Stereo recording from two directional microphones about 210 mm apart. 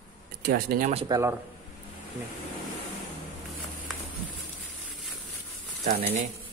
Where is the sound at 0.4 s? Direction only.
45° right (ahead or behind).